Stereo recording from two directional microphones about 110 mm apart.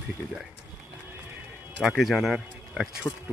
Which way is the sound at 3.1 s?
10° left (ahead or behind).